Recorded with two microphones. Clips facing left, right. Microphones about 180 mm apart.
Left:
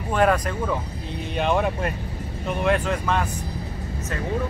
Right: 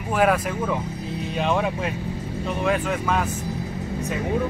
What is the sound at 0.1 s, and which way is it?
Speech, 5° right (ahead or behind).